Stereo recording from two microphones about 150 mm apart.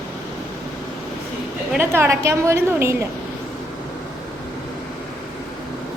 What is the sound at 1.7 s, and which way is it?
A woman's voice, 15° right (ahead or behind).